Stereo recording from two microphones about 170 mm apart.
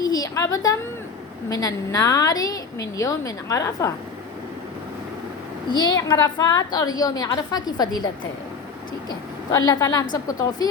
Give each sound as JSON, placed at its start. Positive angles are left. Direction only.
{"t": 0.0, "sound": "a woman's voice", "side_deg": 20}
{"t": 5.7, "sound": "a woman's voice", "side_deg": 25}
{"t": 9.0, "sound": "a woman's voice", "side_deg": 20}